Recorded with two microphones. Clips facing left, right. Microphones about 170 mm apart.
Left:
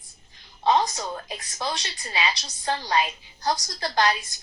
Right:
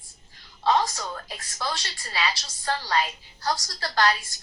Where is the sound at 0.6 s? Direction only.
20° left (ahead or behind).